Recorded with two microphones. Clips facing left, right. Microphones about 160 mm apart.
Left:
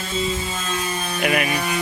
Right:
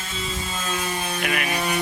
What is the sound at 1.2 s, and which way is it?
Music, 15° left (ahead or behind).